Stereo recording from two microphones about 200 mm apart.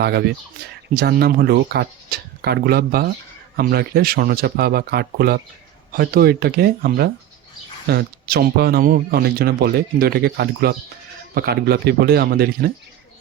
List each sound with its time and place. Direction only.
0.0 s speech: 55° right (ahead or behind)